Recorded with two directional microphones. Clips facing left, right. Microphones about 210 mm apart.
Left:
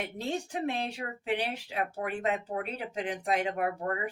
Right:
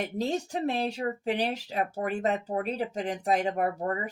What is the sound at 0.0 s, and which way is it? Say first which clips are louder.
Speech: right 4 dB; 40° right (ahead or behind).